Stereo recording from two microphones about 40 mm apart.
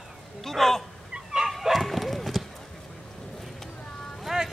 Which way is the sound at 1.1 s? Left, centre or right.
Centre.